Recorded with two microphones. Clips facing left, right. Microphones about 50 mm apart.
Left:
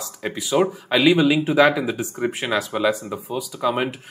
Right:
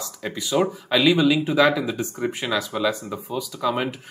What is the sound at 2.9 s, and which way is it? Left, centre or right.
Speech, centre.